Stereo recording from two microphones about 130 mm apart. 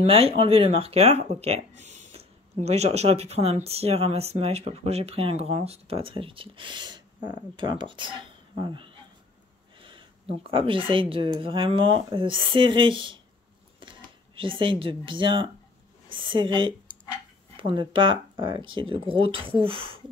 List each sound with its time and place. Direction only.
0.0 s speech: 50° right (ahead or behind)